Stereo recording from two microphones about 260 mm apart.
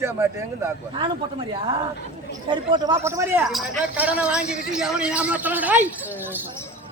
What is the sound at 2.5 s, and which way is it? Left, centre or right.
A man's voice, centre.